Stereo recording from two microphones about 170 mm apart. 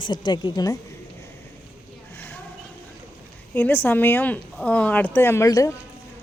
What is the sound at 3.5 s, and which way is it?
Speech, 10° left (ahead or behind).